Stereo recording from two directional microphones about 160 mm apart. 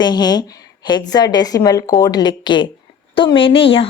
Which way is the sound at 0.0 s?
25° left (ahead or behind).